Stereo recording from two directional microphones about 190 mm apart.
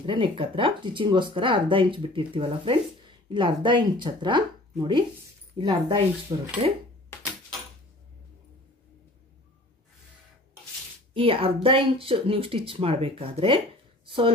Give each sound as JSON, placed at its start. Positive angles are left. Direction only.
{"t": 0.0, "sound": "speech", "side_deg": -25}
{"t": 11.1, "sound": "speech", "side_deg": -30}
{"t": 14.0, "sound": "a sound", "side_deg": -30}